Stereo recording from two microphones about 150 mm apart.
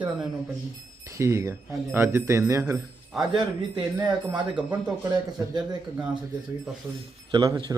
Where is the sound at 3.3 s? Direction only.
30° right (ahead or behind).